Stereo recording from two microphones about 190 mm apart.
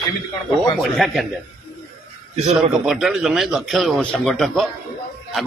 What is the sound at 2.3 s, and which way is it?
Speech, 35° right (ahead or behind).